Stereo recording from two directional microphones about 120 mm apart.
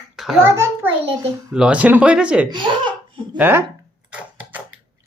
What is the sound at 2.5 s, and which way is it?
Speech, 40° right (ahead or behind).